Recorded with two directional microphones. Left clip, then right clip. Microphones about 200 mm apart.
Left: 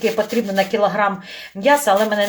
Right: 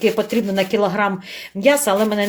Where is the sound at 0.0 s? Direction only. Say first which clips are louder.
Right 1 dB; 50° right (ahead or behind).